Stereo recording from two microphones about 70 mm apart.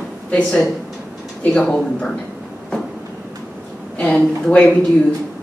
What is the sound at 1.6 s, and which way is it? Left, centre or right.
Speech, centre.